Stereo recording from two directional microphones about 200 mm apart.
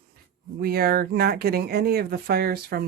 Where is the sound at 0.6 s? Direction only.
50° right (ahead or behind).